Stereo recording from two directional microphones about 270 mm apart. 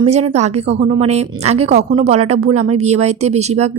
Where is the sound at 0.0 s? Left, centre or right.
Right.